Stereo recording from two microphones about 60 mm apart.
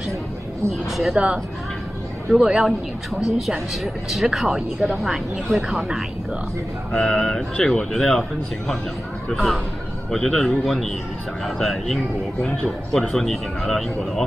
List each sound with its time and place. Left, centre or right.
0.8 s speech: centre
1.1 s speech: centre
3.3 s speech: centre
6.9 s speech: centre